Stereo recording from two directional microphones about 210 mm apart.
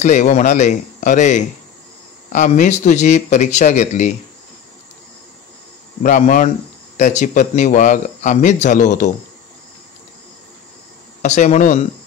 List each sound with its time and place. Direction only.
0.0 s speech: 35° left (ahead or behind)
6.0 s speech: 35° left (ahead or behind)
11.2 s speech: 35° left (ahead or behind)